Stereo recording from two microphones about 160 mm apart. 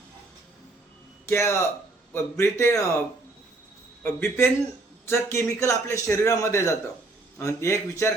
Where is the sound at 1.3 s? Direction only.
15° left (ahead or behind).